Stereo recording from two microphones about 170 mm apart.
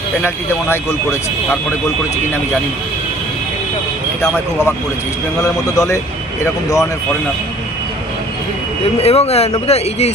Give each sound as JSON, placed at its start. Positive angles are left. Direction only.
{"t": 0.2, "sound": "speech", "side_deg": 15}
{"t": 4.2, "sound": "speech", "side_deg": 15}
{"t": 9.0, "sound": "speech", "side_deg": 35}